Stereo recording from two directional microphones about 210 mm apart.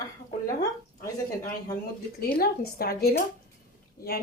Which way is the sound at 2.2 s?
45° left (ahead or behind).